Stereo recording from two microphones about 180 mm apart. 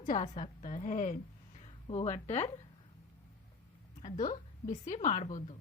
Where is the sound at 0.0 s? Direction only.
45° left (ahead or behind).